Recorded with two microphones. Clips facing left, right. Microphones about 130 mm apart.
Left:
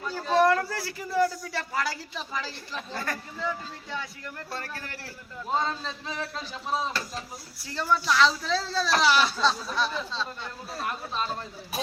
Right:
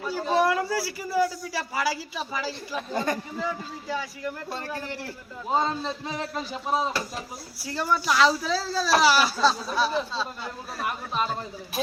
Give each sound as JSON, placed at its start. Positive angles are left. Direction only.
{"t": 0.1, "sound": "a man's voice", "side_deg": -10}
{"t": 4.5, "sound": "a man's voice", "side_deg": -15}